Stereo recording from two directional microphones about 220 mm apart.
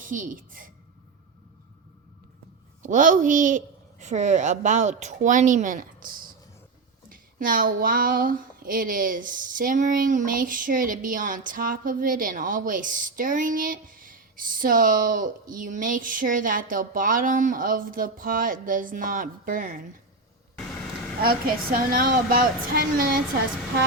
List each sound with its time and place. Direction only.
0.0 s speech: 35° right (ahead or behind)
2.8 s speech: 35° right (ahead or behind)
21.2 s speech: 40° right (ahead or behind)